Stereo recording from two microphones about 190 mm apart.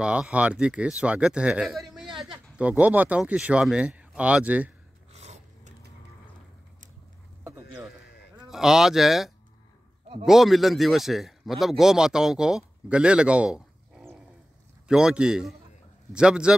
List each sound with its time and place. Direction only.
0.0 s speech: 5° right (ahead or behind)
5.1 s a sound: 35° right (ahead or behind)
8.5 s speech: centre (ahead or behind)